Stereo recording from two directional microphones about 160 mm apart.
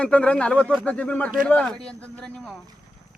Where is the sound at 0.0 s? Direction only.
5° left (ahead or behind).